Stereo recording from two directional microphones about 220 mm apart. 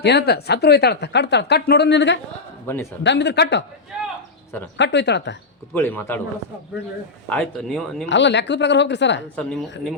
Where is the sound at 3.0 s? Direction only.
50° left (ahead or behind).